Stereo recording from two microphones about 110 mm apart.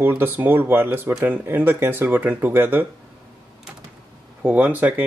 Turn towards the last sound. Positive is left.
turn(degrees=-15)  # may be behind; listen again after turning